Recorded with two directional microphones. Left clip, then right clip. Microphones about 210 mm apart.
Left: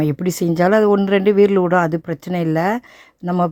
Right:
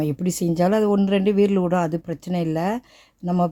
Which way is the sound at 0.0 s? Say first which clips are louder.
Left 5 dB; 15° left (ahead or behind).